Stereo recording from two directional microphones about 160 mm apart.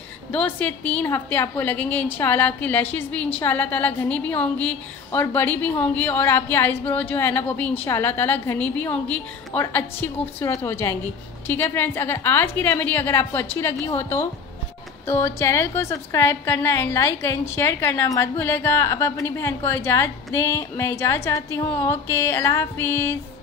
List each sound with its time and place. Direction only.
0.3 s a woman's voice: 10° left (ahead or behind)